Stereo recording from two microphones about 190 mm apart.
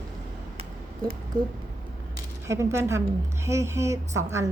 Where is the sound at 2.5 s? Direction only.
15° right (ahead or behind).